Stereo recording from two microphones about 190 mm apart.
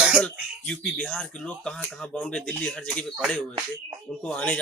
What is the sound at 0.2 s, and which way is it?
Speech, 5° left (ahead or behind).